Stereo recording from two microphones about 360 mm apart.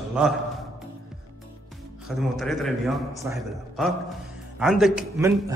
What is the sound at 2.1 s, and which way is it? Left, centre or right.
A man's voice, centre.